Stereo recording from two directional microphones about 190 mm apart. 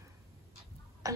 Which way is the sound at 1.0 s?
15° right (ahead or behind).